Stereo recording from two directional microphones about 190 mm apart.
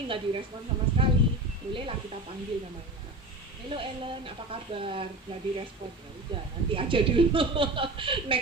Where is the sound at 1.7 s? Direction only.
25° right (ahead or behind).